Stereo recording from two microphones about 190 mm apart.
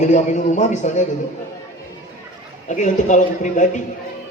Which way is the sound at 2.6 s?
40° left (ahead or behind).